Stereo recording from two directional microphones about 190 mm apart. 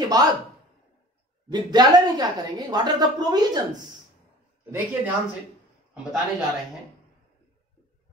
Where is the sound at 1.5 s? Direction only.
20° right (ahead or behind).